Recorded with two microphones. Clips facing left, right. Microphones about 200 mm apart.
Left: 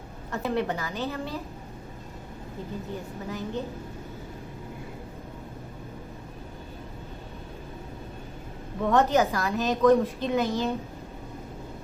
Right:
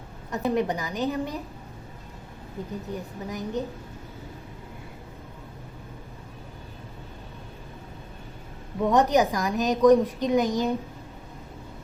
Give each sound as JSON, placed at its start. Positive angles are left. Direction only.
{"t": 0.3, "sound": "a woman's voice", "side_deg": -15}
{"t": 2.9, "sound": "a woman's voice", "side_deg": -15}
{"t": 8.8, "sound": "a woman's voice", "side_deg": -15}